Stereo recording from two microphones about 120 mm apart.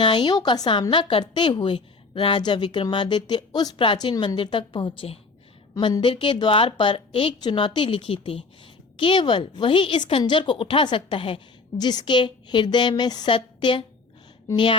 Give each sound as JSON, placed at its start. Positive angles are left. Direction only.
{"t": 0.0, "sound": "a woman's voice", "side_deg": 40}
{"t": 4.4, "sound": "a woman's voice", "side_deg": 45}
{"t": 11.8, "sound": "a woman's voice", "side_deg": 35}